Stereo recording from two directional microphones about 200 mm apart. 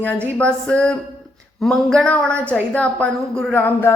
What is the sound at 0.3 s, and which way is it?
A woman's voice, 5° left (ahead or behind).